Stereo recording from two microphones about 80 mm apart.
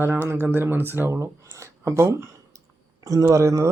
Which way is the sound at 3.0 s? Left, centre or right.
Right.